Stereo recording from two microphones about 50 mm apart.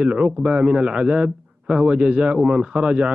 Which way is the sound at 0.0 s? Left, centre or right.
Centre.